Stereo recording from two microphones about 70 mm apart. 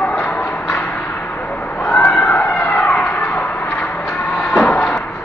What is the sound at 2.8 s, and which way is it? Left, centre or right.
Vehicle, left.